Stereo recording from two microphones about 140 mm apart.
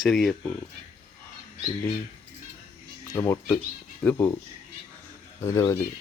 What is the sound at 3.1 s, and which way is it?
Speech, 15° left (ahead or behind).